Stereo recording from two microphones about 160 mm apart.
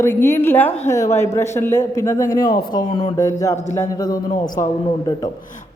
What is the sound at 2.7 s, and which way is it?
Speech, 30° left (ahead or behind).